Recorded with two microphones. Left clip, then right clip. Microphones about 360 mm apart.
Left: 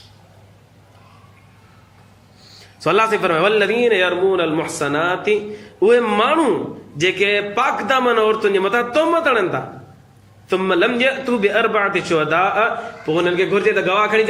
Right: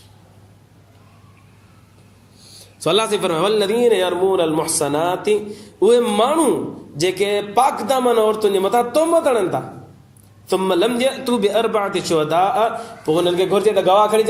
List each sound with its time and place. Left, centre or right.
2.4 s a man's voice: centre